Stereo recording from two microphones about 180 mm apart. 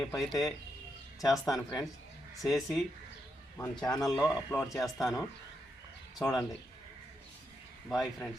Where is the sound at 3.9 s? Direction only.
20° left (ahead or behind).